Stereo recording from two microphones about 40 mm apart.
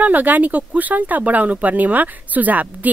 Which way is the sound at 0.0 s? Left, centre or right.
Right.